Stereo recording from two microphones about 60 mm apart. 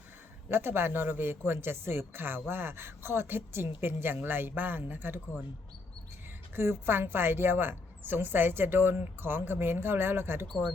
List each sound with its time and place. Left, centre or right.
0.5 s a woman's voice: right
6.6 s a woman's voice: right